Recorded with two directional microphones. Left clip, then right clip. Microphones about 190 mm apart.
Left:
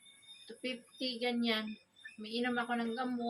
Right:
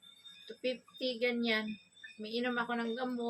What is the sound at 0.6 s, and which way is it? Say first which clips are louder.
Speech: right 4 dB; 20° right (ahead or behind).